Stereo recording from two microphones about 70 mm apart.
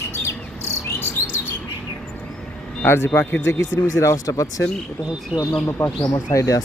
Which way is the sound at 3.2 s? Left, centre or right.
Left.